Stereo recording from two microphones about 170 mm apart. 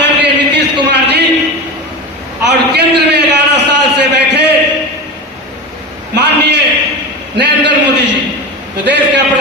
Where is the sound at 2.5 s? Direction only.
85° right.